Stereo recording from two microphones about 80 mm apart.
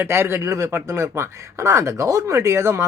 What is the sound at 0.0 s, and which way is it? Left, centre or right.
Speech, right.